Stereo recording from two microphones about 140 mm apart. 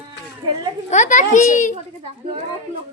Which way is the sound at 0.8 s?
60° left (ahead or behind).